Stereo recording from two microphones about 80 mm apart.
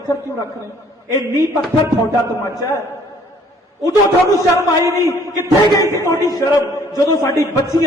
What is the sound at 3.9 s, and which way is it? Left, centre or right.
A man's voice, left.